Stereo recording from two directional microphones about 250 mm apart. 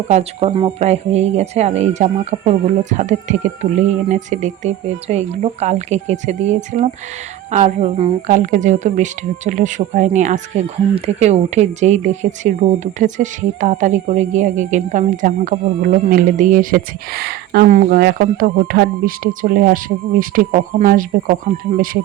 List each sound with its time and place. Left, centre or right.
0.1 s speech: right